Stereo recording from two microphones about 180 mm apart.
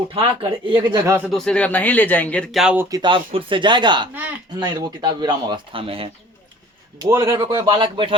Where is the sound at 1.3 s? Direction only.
5° left (ahead or behind).